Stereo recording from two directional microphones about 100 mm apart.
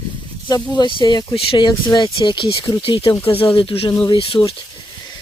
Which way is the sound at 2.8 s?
65° left (ahead or behind).